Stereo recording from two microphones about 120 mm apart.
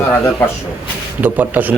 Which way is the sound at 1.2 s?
15° right (ahead or behind).